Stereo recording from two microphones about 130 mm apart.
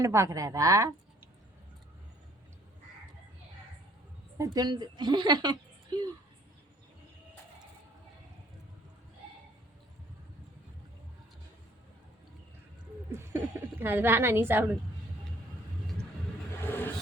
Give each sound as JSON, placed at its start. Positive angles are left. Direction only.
{"t": 0.0, "sound": "a woman's voice", "side_deg": -25}
{"t": 4.4, "sound": "a woman's voice", "side_deg": -30}
{"t": 13.1, "sound": "a woman's voice", "side_deg": -20}
{"t": 16.6, "sound": "vehicle", "side_deg": 15}